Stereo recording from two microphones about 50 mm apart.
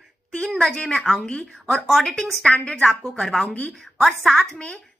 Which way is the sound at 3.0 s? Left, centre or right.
Centre.